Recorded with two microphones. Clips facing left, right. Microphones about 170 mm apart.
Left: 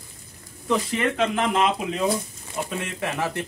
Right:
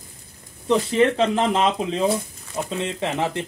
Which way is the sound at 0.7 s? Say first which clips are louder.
Right 5 dB; 30° right (ahead or behind).